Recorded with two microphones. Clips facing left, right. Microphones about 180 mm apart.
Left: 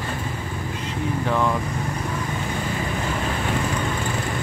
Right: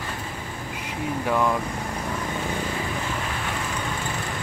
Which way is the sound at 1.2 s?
10° right (ahead or behind).